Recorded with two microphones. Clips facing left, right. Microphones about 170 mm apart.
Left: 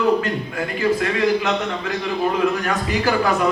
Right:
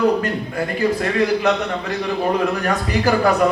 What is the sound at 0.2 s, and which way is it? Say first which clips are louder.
A man's voice: right 1 dB; 40° right (ahead or behind).